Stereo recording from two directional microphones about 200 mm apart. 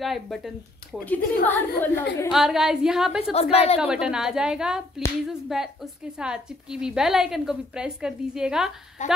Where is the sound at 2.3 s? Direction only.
Centre (ahead or behind).